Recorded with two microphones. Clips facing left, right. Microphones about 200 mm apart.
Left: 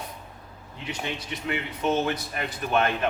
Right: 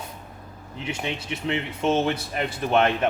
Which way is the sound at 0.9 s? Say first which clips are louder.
Right 2 dB; 25° right (ahead or behind).